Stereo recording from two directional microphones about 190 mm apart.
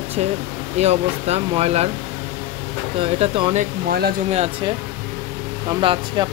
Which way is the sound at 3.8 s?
55° right (ahead or behind).